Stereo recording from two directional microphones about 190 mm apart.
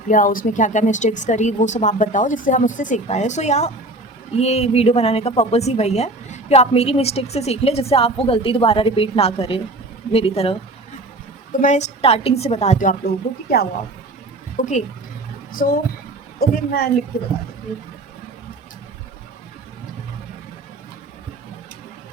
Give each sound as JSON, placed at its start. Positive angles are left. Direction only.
{"t": 0.1, "sound": "a woman's voice", "side_deg": 45}
{"t": 11.6, "sound": "a woman's voice", "side_deg": 35}
{"t": 14.5, "sound": "a woman's voice", "side_deg": 40}